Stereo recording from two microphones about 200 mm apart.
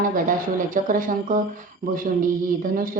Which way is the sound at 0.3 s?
40° right (ahead or behind).